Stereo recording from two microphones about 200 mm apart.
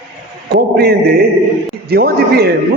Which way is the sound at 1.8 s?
50° right (ahead or behind).